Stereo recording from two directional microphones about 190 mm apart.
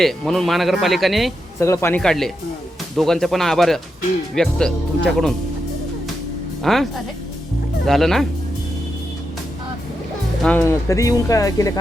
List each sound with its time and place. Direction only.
0.0 s speech: centre (ahead or behind)
1.5 s speech: 15° left (ahead or behind)
6.6 s speech: centre (ahead or behind)
10.4 s speech: 10° left (ahead or behind)